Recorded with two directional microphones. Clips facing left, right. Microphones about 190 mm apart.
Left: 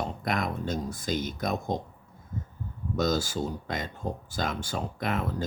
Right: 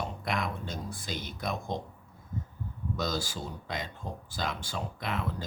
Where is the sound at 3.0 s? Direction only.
45° left (ahead or behind).